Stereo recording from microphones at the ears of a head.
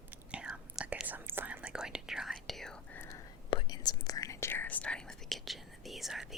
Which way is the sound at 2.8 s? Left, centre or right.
Left.